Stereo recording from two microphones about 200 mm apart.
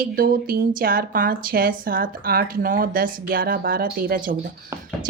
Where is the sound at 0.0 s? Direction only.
45° right (ahead or behind).